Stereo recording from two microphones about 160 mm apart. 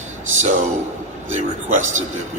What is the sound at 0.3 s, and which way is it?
A man's voice, 50° right (ahead or behind).